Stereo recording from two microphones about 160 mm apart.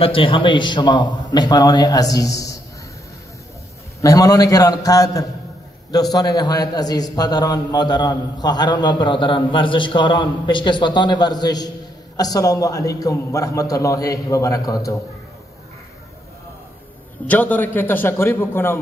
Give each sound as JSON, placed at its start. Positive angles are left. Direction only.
{"t": 0.0, "sound": "a man's voice", "side_deg": 35}
{"t": 4.0, "sound": "a man's voice", "side_deg": 20}
{"t": 17.3, "sound": "a man's voice", "side_deg": 10}